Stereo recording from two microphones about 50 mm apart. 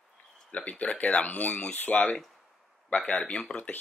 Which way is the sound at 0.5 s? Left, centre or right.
Left.